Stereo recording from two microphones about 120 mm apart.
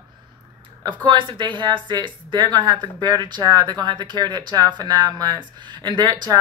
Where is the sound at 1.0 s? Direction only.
45° right (ahead or behind).